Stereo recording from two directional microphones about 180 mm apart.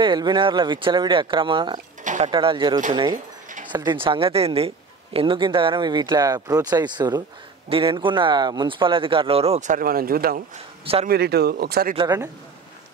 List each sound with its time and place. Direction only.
0.0 s a man's voice: 25° right (ahead or behind)
2.0 s a sound: 40° right (ahead or behind)
2.3 s a man's voice: 25° right (ahead or behind); by 11.9 s 60° right (ahead or behind)
11.9 s a man's voice: 25° right (ahead or behind)